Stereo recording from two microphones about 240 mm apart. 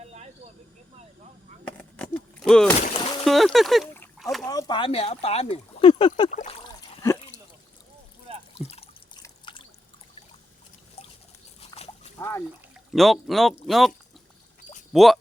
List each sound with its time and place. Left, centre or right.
0.0 s snake: right
1.6 s a sound: centre
2.7 s splash: left
3.2 s rowboat: centre
4.4 s speech: centre
8.5 s drip: left
11.6 s dog: left
12.9 s speech: centre
14.9 s speech: centre